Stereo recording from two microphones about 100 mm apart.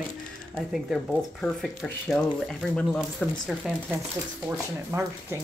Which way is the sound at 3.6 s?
5° right (ahead or behind).